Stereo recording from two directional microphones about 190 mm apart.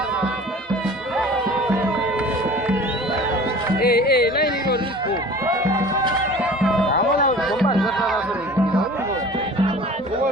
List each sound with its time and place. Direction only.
3.8 s music: 55° left (ahead or behind)
6.4 s music: 5° right (ahead or behind)